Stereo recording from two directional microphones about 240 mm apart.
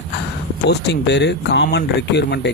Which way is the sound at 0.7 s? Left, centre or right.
Left.